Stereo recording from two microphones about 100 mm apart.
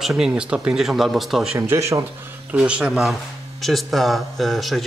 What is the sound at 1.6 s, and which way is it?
Speech, 30° right (ahead or behind).